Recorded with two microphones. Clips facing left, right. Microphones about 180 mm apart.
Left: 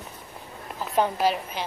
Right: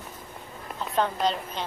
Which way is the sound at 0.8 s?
10° left (ahead or behind).